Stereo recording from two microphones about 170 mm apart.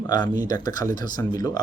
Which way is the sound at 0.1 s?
20° left (ahead or behind).